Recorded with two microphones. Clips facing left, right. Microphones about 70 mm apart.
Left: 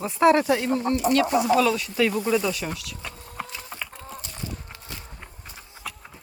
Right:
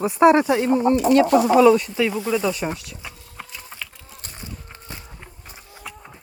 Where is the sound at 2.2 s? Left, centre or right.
Centre.